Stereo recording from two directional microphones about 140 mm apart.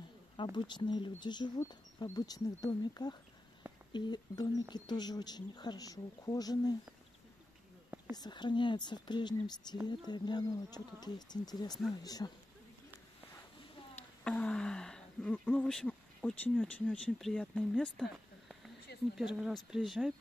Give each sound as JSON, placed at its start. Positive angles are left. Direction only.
{"t": 0.4, "sound": "speech", "side_deg": 35}
{"t": 8.1, "sound": "speech", "side_deg": 30}
{"t": 14.2, "sound": "speech", "side_deg": 10}